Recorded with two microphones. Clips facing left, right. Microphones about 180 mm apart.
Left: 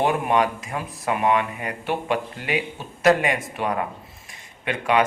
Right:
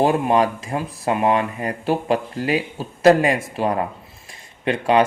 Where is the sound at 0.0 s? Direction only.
35° right (ahead or behind).